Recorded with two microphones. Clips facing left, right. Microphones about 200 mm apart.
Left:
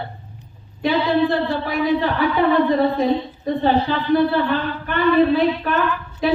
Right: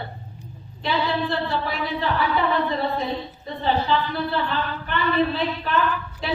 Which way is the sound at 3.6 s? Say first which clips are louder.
Left 3 dB; 50° left (ahead or behind).